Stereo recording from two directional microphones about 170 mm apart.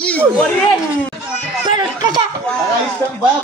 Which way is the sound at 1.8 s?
25° right (ahead or behind).